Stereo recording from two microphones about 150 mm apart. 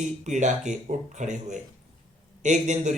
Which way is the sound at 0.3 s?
55° right (ahead or behind).